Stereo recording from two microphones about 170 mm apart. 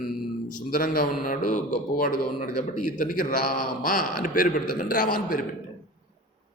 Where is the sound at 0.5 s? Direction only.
55° left (ahead or behind).